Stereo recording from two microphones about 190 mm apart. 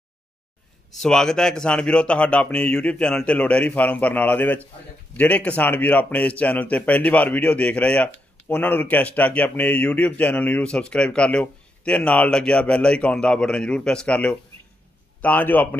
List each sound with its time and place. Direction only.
0.9 s a man's voice: 5° left (ahead or behind)